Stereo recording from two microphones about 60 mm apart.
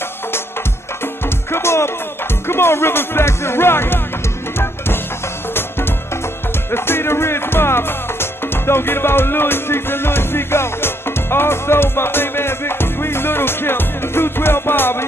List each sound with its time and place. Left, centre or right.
1.5 s music: left
5.5 s music: left